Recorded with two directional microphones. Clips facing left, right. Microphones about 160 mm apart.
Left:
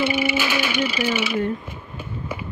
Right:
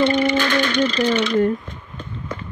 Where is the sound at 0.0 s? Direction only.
10° left (ahead or behind).